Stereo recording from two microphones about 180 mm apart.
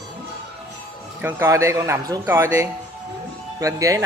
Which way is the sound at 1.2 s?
15° right (ahead or behind).